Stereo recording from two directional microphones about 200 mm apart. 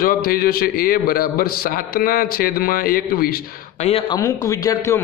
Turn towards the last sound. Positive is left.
turn(degrees=15)  # may be behind; listen again after turning